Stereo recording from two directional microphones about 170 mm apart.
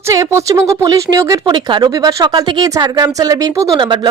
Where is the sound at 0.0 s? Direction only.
15° right (ahead or behind).